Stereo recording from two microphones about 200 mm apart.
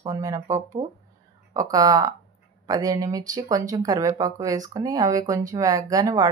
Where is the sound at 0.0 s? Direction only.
15° right (ahead or behind).